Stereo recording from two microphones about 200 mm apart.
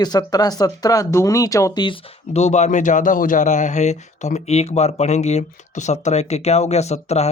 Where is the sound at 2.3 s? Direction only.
35° left (ahead or behind).